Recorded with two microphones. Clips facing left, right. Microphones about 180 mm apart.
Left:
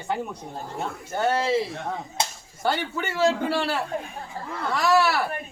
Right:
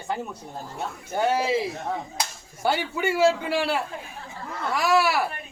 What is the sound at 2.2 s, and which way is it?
Whip, 25° left (ahead or behind).